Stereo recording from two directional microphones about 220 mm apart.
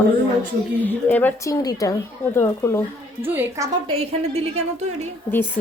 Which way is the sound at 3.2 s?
10° right (ahead or behind).